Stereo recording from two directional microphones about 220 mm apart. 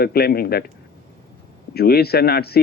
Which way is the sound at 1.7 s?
45° left (ahead or behind).